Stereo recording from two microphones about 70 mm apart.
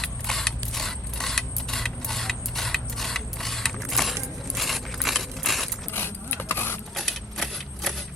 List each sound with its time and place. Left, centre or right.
0.0 s mechanisms: centre
5.9 s a sound: left
6.9 s typewriter: centre